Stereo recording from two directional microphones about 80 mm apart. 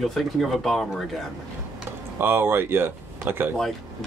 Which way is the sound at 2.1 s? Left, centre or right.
Right.